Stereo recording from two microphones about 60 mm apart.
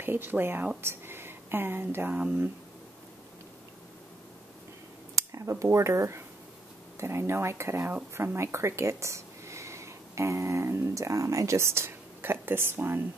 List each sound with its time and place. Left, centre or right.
0.0 s speech: right
5.1 s speech: right